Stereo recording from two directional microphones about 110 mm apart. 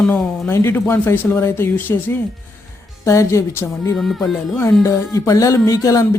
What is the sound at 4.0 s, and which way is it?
Music, centre (ahead or behind).